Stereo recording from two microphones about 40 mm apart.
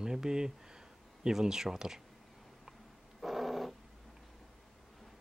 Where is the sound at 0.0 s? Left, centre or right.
Centre.